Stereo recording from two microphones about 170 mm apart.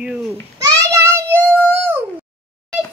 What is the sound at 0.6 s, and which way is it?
Child singing, 20° right (ahead or behind).